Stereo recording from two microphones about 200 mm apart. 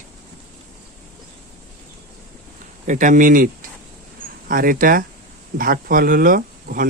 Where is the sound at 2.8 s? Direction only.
40° right (ahead or behind).